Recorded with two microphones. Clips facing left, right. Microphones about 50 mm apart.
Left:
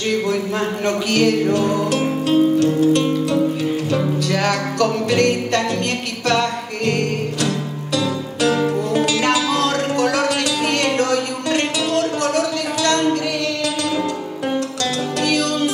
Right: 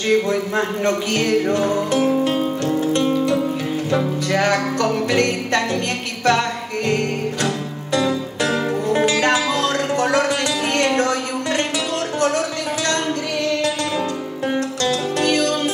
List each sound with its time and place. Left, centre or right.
0.1 s music: right
4.3 s music: right
7.9 s music: right
11.0 s a sound: right
15.2 s music: right